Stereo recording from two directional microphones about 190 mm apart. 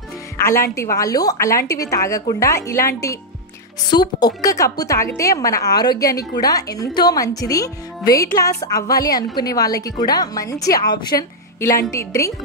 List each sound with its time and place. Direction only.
0.5 s speech: 15° left (ahead or behind)
3.9 s speech: 20° left (ahead or behind)